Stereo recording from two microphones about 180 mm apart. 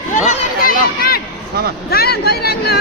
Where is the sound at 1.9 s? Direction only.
60° left (ahead or behind).